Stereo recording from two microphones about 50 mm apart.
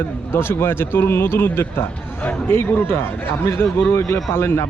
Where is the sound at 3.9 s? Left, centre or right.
Left.